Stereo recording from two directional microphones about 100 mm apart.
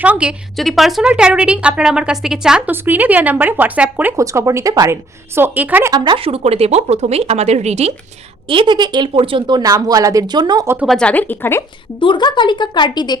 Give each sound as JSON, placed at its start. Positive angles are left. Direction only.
{"t": 0.0, "sound": "a woman's voice", "side_deg": -10}
{"t": 0.5, "sound": "speech", "side_deg": 0}
{"t": 2.6, "sound": "speech", "side_deg": -20}
{"t": 4.2, "sound": "a woman's voice", "side_deg": -30}
{"t": 6.1, "sound": "speech", "side_deg": -80}
{"t": 8.4, "sound": "speech", "side_deg": -55}
{"t": 9.6, "sound": "speech", "side_deg": -35}
{"t": 10.8, "sound": "speech", "side_deg": 10}
{"t": 11.9, "sound": "speech", "side_deg": 55}